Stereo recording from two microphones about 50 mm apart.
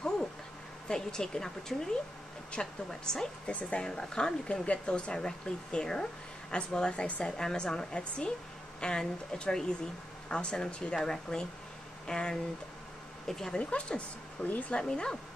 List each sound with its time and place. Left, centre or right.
0.8 s a woman's voice: centre
7.3 s speech: centre
13.6 s a woman's voice: left